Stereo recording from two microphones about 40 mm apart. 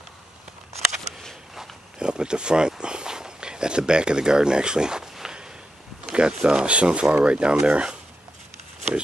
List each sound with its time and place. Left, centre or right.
2.0 s speech: right
6.1 s speech: right